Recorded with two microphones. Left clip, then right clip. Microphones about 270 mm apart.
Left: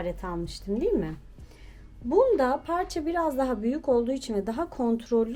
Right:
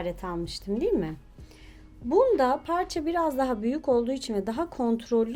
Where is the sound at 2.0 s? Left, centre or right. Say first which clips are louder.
Even; right.